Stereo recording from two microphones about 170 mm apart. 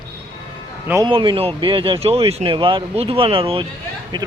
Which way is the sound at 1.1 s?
30° right (ahead or behind).